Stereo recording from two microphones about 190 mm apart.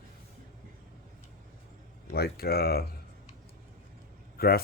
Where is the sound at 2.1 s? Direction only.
55° left (ahead or behind).